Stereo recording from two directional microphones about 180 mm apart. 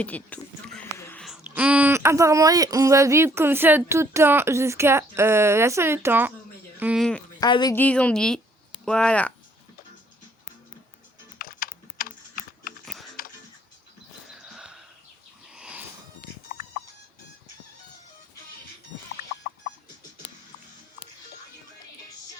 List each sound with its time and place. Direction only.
0.0 s a sound: 10° left (ahead or behind)
1.2 s speech: 5° right (ahead or behind)
7.0 s speech: 5° left (ahead or behind)
7.3 s speech: 20° left (ahead or behind)
7.8 s speech: 10° left (ahead or behind)
11.3 s typing: 55° left (ahead or behind)
12.8 s music: centre (ahead or behind)
14.3 s a sound: 5° right (ahead or behind)
16.5 s a sound: 55° left (ahead or behind)